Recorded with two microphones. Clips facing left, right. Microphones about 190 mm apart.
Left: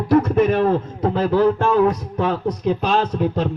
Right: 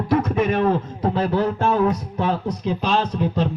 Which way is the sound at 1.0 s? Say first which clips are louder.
Left 3 dB; 55° left (ahead or behind).